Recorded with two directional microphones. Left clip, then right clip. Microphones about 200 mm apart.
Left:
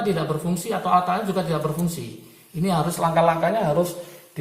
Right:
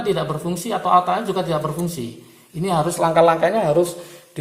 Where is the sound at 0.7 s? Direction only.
35° right (ahead or behind).